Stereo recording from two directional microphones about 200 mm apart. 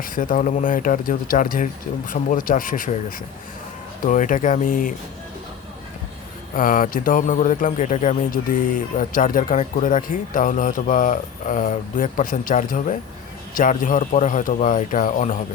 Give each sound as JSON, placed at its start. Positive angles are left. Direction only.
{"t": 0.0, "sound": "speech", "side_deg": 40}
{"t": 4.0, "sound": "speech", "side_deg": 40}
{"t": 6.5, "sound": "speech", "side_deg": 45}